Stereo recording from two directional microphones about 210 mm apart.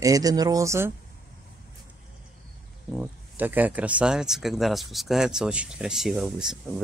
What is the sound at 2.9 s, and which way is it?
Speech, 5° right (ahead or behind).